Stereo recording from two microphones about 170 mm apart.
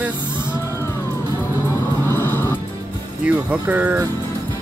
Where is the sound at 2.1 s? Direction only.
10° left (ahead or behind).